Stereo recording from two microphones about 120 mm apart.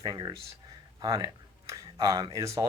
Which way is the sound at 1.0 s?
30° right (ahead or behind).